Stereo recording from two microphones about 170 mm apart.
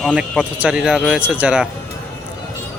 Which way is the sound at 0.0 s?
Centre (ahead or behind).